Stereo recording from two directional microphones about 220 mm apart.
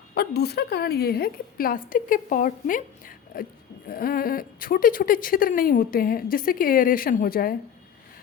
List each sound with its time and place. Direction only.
0.1 s a woman's voice: 45° left (ahead or behind)